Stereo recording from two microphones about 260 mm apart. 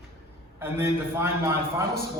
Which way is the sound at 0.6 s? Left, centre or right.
Centre.